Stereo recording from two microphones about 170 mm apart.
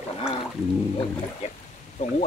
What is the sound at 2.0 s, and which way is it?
Speech, 45° left (ahead or behind).